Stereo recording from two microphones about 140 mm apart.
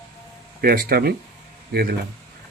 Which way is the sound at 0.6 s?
90° right.